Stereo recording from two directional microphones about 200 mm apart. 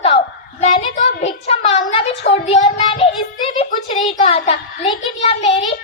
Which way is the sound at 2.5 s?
35° left (ahead or behind).